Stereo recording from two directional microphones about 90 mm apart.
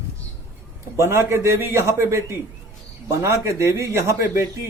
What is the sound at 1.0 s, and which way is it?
A man's voice, 30° right (ahead or behind).